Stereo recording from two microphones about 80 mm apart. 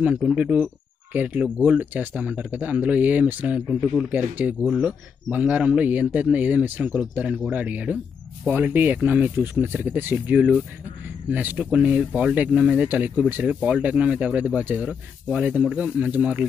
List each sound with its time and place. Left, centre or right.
0.0 s speech: centre
12.8 s speech: right